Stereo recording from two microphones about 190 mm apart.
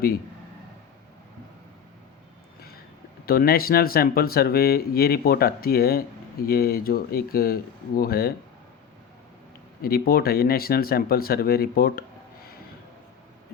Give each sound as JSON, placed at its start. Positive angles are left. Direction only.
{"t": 3.2, "sound": "speech", "side_deg": 50}
{"t": 9.8, "sound": "speech", "side_deg": 50}